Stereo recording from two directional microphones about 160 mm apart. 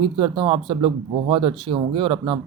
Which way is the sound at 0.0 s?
30° right (ahead or behind).